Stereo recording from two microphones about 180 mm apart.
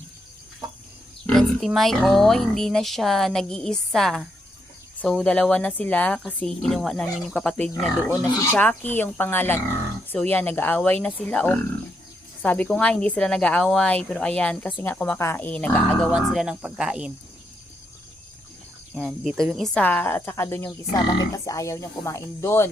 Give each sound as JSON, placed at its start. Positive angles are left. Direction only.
{"t": 1.3, "sound": "speech", "side_deg": 0}
{"t": 18.9, "sound": "speech", "side_deg": 0}